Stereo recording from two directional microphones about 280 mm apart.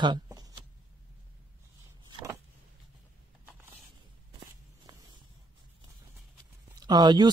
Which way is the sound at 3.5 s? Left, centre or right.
Centre.